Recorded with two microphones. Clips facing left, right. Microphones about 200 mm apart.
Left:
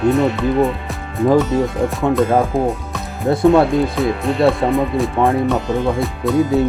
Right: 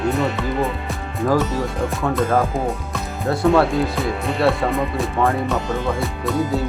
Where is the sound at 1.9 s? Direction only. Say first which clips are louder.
Left 4 dB; centre (ahead or behind).